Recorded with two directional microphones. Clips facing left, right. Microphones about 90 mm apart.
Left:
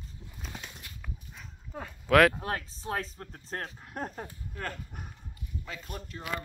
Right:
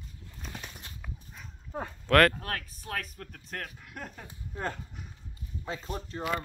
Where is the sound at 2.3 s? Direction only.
20° left (ahead or behind); by 4.2 s 35° left (ahead or behind).